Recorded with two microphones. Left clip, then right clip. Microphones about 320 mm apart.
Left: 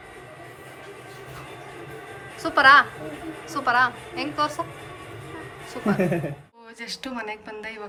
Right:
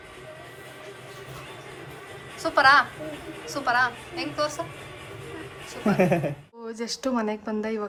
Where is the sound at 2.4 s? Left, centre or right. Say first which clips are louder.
Left 3 dB; centre.